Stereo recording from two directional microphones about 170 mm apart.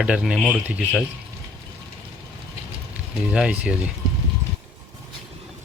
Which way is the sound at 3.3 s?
5° right (ahead or behind).